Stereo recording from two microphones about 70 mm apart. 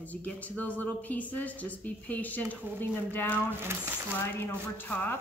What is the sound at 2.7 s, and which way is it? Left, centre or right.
Speech, right.